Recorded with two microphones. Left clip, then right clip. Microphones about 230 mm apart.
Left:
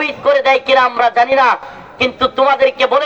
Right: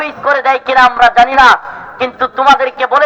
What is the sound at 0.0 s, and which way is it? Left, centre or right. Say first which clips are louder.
Speech: right 1 dB; left.